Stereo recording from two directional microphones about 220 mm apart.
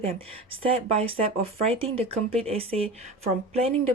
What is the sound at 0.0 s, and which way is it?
Speech, 25° right (ahead or behind).